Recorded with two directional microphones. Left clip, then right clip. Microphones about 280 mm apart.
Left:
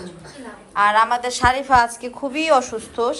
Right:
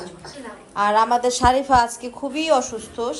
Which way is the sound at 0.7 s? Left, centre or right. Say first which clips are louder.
Left 2 dB; centre.